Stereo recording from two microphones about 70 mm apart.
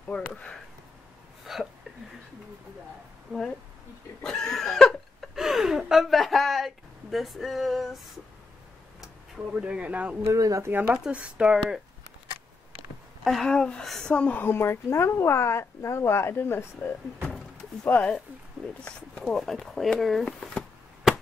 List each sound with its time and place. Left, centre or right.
0.1 s speech: centre
1.4 s a sound: centre
3.3 s speech: centre
4.2 s a sound: centre
5.3 s a sound: centre
9.0 s speech: centre
10.2 s speech: right
10.7 s speech: right
11.1 s speech: centre
13.2 s speech: centre
14.1 s a woman's voice: left
18.9 s speech: centre
19.3 s speech: centre
20.2 s speech: centre